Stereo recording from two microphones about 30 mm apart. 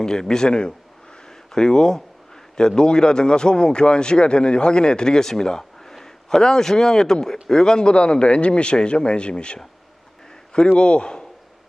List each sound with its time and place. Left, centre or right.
0.0 s a man's voice: left
10.8 s a man's voice: left